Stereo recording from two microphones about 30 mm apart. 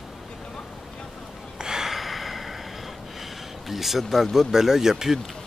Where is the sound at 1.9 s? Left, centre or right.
Centre.